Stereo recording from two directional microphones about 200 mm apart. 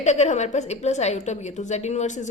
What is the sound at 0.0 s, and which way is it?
A woman's voice, 35° left (ahead or behind).